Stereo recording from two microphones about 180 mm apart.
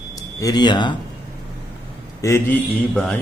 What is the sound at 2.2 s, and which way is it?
Speech, 15° left (ahead or behind).